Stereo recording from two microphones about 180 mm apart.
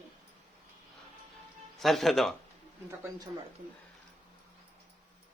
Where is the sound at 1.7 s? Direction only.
Centre (ahead or behind).